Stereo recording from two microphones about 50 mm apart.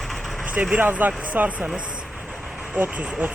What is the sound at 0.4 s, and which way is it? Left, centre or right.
Speech, right.